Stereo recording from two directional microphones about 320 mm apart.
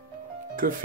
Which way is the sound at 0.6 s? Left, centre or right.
Right.